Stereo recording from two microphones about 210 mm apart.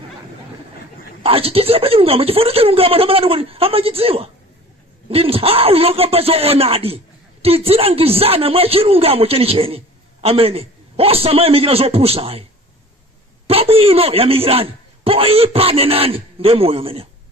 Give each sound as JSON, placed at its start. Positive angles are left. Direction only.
{"t": 1.2, "sound": "speech", "side_deg": -25}
{"t": 13.5, "sound": "speech", "side_deg": -25}